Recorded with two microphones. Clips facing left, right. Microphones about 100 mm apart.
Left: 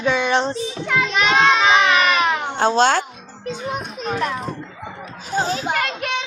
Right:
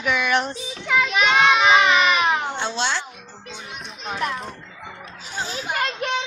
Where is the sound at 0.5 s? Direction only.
Centre (ahead or behind).